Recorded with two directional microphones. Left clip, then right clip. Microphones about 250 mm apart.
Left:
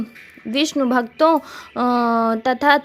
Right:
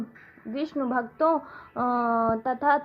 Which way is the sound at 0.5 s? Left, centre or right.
Left.